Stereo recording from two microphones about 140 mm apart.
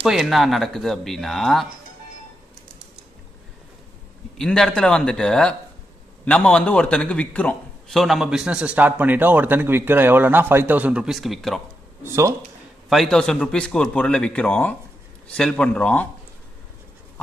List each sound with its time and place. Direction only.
0.0 s speech: centre (ahead or behind)
4.4 s a man's voice: 5° left (ahead or behind)
12.0 s speech: 20° right (ahead or behind)
12.9 s speech: centre (ahead or behind)